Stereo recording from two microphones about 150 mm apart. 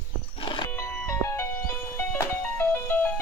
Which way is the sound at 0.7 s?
20° left (ahead or behind).